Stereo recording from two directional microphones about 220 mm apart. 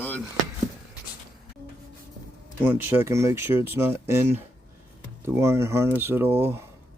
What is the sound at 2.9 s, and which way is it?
Speech, 10° right (ahead or behind).